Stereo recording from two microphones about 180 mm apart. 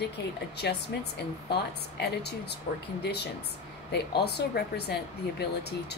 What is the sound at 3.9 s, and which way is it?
Speech, 65° left (ahead or behind).